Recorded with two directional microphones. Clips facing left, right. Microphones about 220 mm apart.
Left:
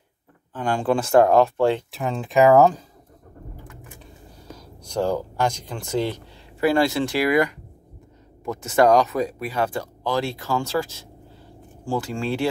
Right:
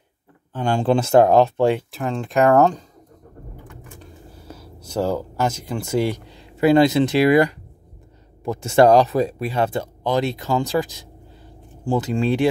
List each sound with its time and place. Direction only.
0.5 s speech: 25° right (ahead or behind)
1.9 s speech: centre (ahead or behind)
4.8 s speech: 5° right (ahead or behind)
6.6 s speech: 20° right (ahead or behind)